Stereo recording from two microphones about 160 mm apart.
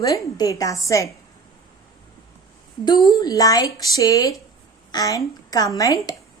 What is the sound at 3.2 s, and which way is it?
A woman's voice, 20° left (ahead or behind).